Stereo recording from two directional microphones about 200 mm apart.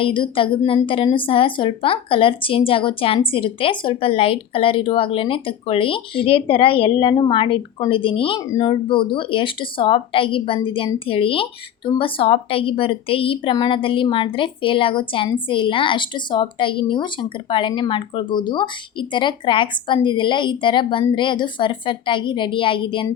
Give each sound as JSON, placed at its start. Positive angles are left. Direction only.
{"t": 0.0, "sound": "a woman's voice", "side_deg": 25}